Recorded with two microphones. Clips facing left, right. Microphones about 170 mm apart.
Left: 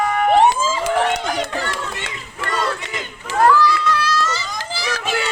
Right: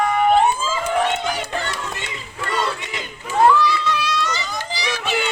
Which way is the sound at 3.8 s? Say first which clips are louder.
Left 2 dB; 20° right (ahead or behind).